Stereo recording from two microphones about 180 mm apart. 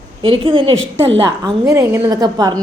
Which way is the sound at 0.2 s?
30° right (ahead or behind).